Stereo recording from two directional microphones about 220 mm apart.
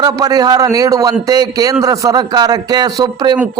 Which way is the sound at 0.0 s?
15° right (ahead or behind).